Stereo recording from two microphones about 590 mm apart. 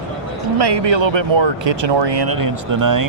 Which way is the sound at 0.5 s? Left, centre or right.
Right.